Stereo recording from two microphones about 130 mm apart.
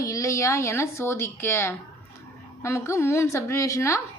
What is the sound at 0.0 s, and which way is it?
A woman's voice, 25° left (ahead or behind).